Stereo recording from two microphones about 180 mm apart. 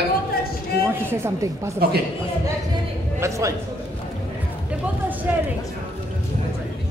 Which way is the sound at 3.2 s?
15° right (ahead or behind).